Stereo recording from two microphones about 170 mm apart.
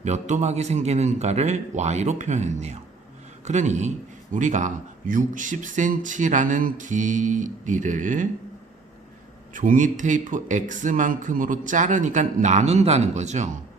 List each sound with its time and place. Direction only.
0.0 s a man's voice: 45° right (ahead or behind)
9.5 s a man's voice: 50° right (ahead or behind)